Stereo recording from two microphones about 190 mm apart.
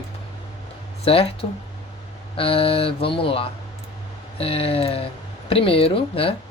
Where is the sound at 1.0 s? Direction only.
30° left (ahead or behind).